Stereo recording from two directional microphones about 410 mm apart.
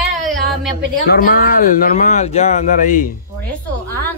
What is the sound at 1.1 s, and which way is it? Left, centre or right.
Speech, left.